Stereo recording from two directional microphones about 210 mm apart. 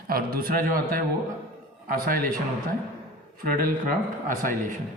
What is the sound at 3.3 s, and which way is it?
Speech, 40° right (ahead or behind).